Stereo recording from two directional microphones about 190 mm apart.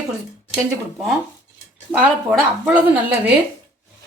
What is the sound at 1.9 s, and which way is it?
Speech, 5° right (ahead or behind).